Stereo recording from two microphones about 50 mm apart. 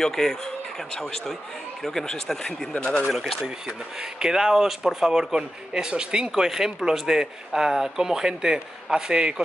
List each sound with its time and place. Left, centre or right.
0.0 s speech: centre
2.7 s speech: left
3.1 s speech: centre
4.2 s speech: centre